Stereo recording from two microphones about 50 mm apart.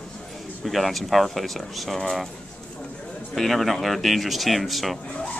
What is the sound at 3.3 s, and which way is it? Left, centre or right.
Speech, centre.